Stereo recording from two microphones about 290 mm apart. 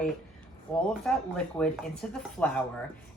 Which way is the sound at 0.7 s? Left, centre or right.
Centre.